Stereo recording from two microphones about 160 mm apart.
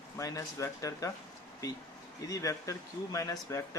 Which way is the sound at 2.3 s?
20° left (ahead or behind).